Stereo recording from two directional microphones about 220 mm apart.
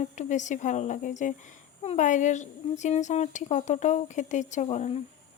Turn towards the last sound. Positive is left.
turn(degrees=30)  # may be behind; listen again after turning